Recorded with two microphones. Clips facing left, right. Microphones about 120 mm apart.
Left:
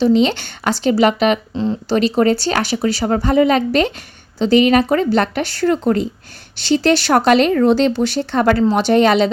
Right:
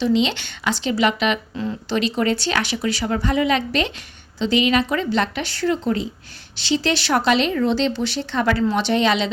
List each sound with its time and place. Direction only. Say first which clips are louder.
0.0 s speech: left 6 dB; 45° left (ahead or behind)
1.5 s a woman's voice: left 6 dB; 30° left (ahead or behind)
2.0 s a woman's voice: left 6 dB; 40° left (ahead or behind)